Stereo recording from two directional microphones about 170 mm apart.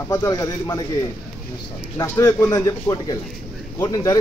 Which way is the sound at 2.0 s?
20° left (ahead or behind).